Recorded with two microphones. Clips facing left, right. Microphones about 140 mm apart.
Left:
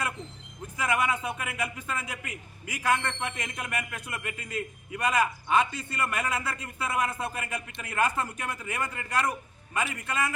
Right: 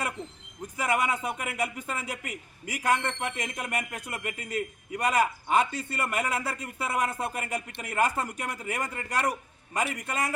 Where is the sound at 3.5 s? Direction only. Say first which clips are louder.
Right 2 dB; 35° right (ahead or behind).